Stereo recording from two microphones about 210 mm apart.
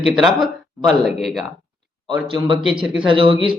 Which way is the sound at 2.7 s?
25° right (ahead or behind).